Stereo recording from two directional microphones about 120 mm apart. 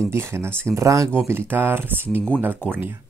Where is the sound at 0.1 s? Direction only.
20° right (ahead or behind).